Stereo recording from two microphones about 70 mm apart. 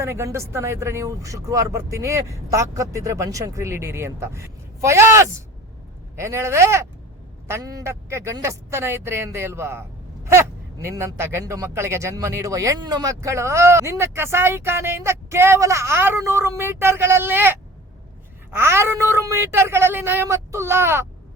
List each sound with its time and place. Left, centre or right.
0.0 s speech: right
7.6 s a man's voice: right
7.9 s speech: right
12.8 s speech: right
20.2 s speech: right